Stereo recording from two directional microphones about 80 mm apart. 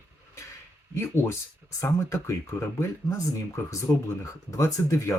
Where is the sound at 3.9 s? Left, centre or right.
Left.